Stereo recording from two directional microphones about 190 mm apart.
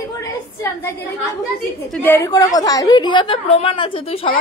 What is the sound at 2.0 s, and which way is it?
A woman's voice, 15° left (ahead or behind).